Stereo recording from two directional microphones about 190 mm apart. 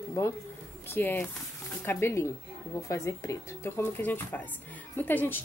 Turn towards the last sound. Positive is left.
turn(degrees=10)  # may be behind; listen again after turning